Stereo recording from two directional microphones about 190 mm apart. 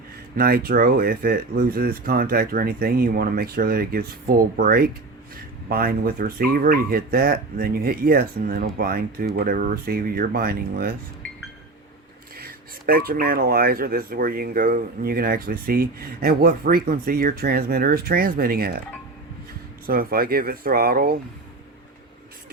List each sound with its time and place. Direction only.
0.3 s speech: 50° right (ahead or behind)
12.4 s speech: 50° right (ahead or behind)
19.9 s speech: 50° right (ahead or behind)